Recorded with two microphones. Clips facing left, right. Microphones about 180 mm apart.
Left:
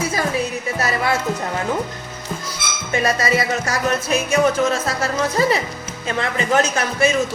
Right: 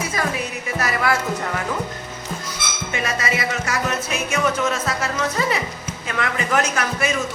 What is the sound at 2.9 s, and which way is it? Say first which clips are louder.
Music: left 6 dB; 35° left (ahead or behind).